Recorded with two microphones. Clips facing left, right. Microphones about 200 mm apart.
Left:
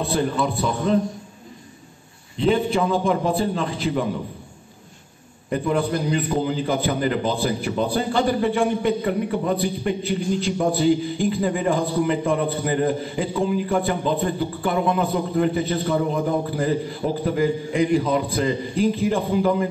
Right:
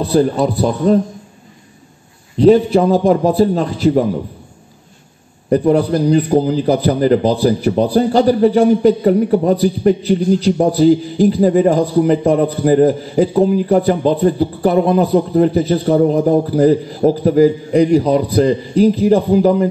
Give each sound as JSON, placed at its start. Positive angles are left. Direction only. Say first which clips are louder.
{"t": 0.0, "sound": "a man's voice", "louder": "right 8 dB", "side_deg": -40}
{"t": 2.3, "sound": "a man's voice", "louder": "right 10 dB", "side_deg": -40}
{"t": 5.5, "sound": "a man's voice", "louder": "right 9 dB", "side_deg": -40}